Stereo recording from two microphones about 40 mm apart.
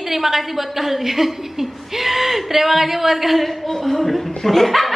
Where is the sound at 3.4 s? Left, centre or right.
Centre.